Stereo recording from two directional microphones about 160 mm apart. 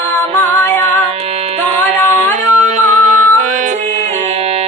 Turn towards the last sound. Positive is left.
turn(degrees=-50)  # may be behind; listen again after turning